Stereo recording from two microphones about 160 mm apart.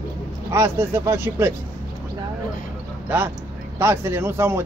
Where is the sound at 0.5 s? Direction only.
15° right (ahead or behind).